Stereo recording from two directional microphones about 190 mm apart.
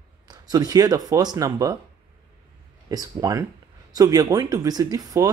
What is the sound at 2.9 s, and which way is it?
Speech, 20° right (ahead or behind).